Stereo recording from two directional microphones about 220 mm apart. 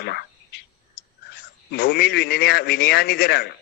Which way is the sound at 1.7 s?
45° left (ahead or behind).